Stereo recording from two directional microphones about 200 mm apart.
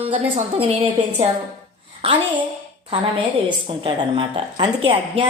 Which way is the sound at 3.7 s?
25° right (ahead or behind).